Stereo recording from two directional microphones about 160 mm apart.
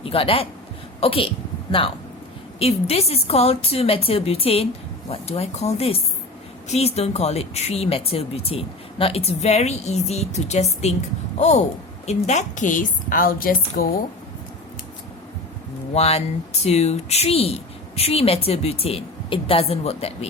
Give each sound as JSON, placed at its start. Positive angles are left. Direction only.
{"t": 0.0, "sound": "a woman's voice", "side_deg": 35}
{"t": 2.6, "sound": "a woman's voice", "side_deg": 40}
{"t": 16.0, "sound": "speech", "side_deg": 40}